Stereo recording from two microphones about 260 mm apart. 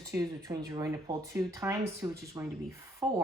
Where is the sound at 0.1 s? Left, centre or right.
Centre.